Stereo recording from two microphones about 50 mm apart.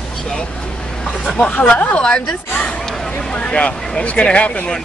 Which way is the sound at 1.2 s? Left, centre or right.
Centre.